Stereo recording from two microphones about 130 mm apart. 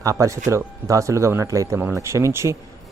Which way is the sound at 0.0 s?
25° right (ahead or behind).